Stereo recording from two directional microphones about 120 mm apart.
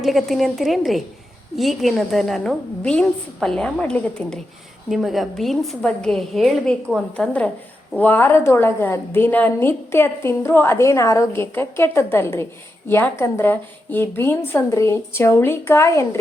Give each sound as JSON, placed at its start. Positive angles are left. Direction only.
{"t": 0.0, "sound": "a woman's voice", "side_deg": 0}